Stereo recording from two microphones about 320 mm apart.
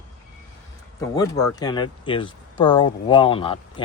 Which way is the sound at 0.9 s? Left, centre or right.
Centre.